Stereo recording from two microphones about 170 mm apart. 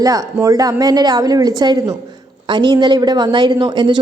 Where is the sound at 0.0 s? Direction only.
20° right (ahead or behind).